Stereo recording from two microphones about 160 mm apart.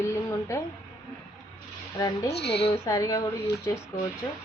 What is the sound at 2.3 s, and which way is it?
Speech, 90° left.